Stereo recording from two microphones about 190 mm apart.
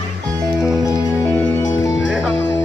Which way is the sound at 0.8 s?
15° left (ahead or behind).